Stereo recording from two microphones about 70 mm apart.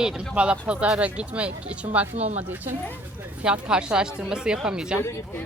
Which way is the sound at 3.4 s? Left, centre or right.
Centre.